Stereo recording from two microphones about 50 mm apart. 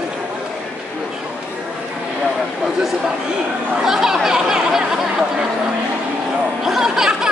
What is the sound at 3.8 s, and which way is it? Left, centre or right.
Chatter, centre.